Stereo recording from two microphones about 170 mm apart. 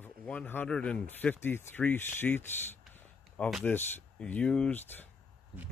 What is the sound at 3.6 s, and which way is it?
Speech, 10° left (ahead or behind).